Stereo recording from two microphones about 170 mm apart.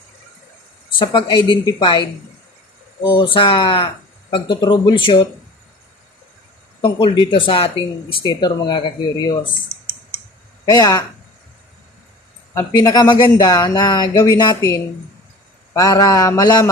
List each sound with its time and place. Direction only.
0.9 s speech: 25° left (ahead or behind)
3.3 s speech: 30° left (ahead or behind)
6.8 s speech: 30° left (ahead or behind)
10.7 s speech: 20° left (ahead or behind)
12.5 s speech: 20° left (ahead or behind)